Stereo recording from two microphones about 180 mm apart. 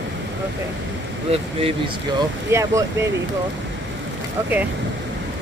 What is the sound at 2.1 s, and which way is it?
Speech, 15° right (ahead or behind).